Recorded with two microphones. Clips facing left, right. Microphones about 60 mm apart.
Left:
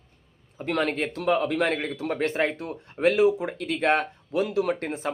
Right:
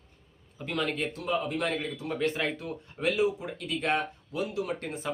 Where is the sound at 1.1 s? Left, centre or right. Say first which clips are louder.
Left 10 dB; left.